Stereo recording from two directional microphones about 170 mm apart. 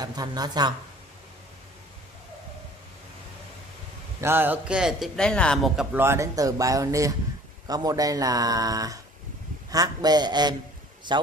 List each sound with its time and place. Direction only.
0.0 s speech: 25° right (ahead or behind)
4.2 s a man's voice: 15° right (ahead or behind); by 5.9 s 5° left (ahead or behind)
5.9 s speech: 15° right (ahead or behind)